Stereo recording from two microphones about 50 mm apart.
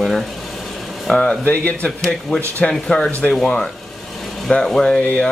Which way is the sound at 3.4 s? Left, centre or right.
Centre.